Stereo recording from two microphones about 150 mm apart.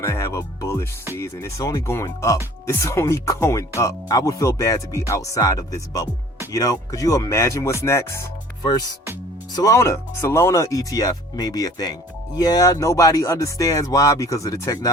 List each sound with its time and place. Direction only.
0.0 s speech: 20° left (ahead or behind)